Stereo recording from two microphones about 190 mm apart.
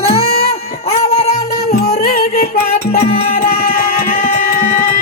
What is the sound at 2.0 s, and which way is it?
Music, 50° left (ahead or behind).